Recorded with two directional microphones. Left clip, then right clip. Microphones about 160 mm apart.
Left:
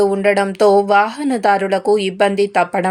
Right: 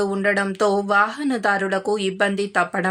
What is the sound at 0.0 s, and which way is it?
Speech, 15° left (ahead or behind).